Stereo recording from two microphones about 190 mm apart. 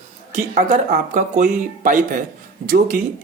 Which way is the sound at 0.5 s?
45° right (ahead or behind).